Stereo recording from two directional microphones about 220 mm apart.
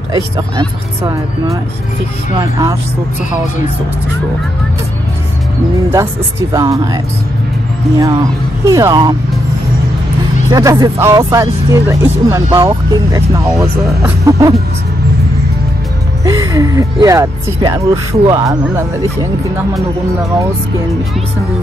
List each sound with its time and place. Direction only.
0.1 s speech: 15° right (ahead or behind)
6.5 s speech: 15° right (ahead or behind)
8.0 s speech: 15° right (ahead or behind)
10.5 s speech: 15° right (ahead or behind)
16.3 s speech: 15° right (ahead or behind)